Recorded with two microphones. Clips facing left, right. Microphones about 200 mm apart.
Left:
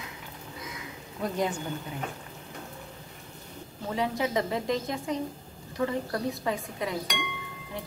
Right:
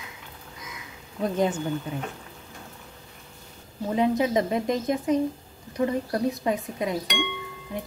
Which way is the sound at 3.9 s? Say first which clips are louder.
Right 6 dB; 20° right (ahead or behind).